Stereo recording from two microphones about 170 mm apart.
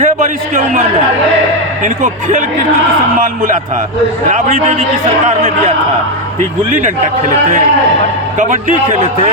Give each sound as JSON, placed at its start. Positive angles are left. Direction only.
{"t": 0.0, "sound": "a man's voice", "side_deg": -50}
{"t": 8.4, "sound": "a man's voice", "side_deg": -50}